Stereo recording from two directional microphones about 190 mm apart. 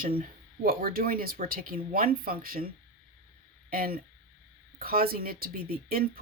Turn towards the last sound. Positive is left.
turn(degrees=-50)  # may be behind; listen again after turning